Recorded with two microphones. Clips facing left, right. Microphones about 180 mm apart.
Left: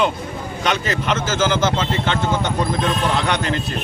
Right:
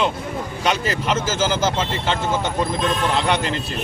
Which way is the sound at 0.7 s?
10° right (ahead or behind).